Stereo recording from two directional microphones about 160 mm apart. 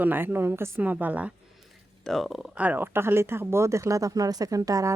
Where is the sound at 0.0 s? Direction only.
10° right (ahead or behind).